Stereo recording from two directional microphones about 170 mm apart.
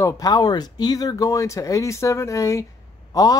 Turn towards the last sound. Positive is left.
turn(degrees=20)  # may be behind; listen again after turning